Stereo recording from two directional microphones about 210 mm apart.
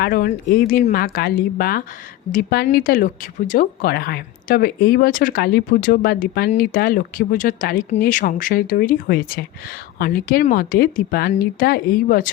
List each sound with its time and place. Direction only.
0.0 s speech: 45° left (ahead or behind)